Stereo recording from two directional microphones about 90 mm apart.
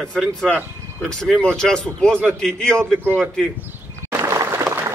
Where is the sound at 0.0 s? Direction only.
5° left (ahead or behind).